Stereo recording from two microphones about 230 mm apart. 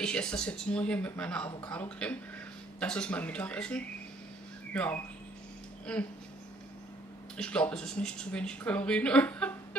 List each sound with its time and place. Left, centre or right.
0.0 s speech: centre
7.3 s speech: centre